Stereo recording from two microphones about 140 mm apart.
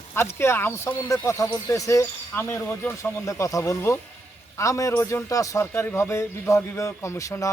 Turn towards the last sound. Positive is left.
turn(degrees=20)  # may be behind; listen again after turning